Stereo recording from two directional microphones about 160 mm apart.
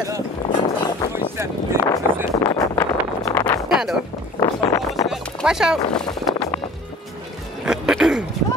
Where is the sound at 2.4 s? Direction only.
20° left (ahead or behind).